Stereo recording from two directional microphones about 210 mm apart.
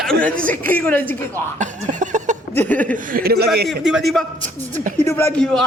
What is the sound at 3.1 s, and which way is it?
Speech, 45° right (ahead or behind).